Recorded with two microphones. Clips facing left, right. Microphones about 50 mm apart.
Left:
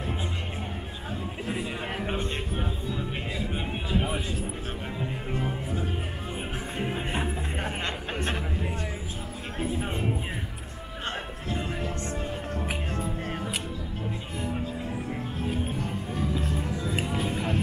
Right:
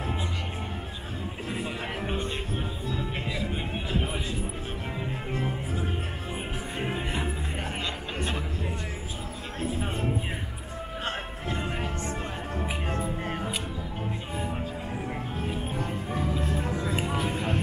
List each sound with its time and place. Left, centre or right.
5.3 s music: centre
7.8 s music: left
9.8 s music: centre
14.5 s music: centre
16.1 s music: right